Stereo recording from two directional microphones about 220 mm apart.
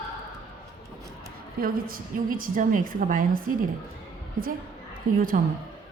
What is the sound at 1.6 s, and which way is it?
A woman's voice, 40° right (ahead or behind).